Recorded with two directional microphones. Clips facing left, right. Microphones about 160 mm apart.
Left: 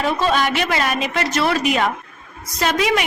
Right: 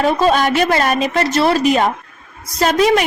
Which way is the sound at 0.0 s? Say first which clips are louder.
Right 5 dB; 45° right (ahead or behind).